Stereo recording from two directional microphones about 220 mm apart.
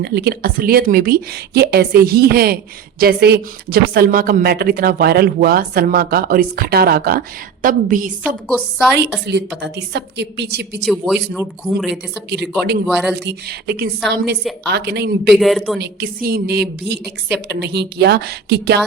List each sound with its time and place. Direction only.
0.0 s a woman's voice: 45° right (ahead or behind)
8.4 s speech: centre (ahead or behind)
9.6 s speech: 50° right (ahead or behind)
10.8 s speech: 5° right (ahead or behind)
12.3 s speech: 50° right (ahead or behind)
12.9 s speech: 5° right (ahead or behind)
13.1 s speech: 45° right (ahead or behind)
15.3 s speech: centre (ahead or behind)
15.8 s speech: 45° right (ahead or behind)